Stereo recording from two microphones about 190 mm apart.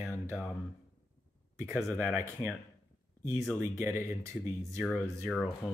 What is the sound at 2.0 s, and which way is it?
Speech, 5° right (ahead or behind).